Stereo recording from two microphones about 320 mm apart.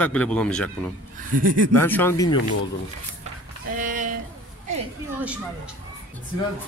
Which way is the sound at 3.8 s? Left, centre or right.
Right.